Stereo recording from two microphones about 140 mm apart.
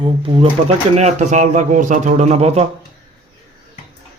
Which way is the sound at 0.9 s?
55° right (ahead or behind).